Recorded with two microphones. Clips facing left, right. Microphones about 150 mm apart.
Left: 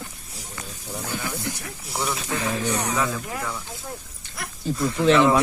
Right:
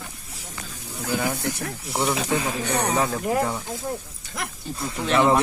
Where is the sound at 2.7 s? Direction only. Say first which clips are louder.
Right 2 dB; 60° right (ahead or behind).